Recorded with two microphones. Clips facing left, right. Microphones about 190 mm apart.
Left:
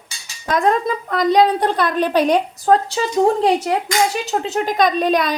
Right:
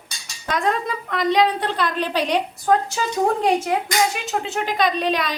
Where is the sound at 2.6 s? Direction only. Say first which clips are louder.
Left 4 dB; 35° left (ahead or behind).